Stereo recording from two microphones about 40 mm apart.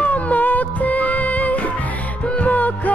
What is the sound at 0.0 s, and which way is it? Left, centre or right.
Music, left.